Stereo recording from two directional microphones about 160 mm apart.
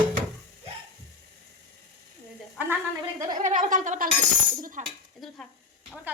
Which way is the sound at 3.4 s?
50° right (ahead or behind).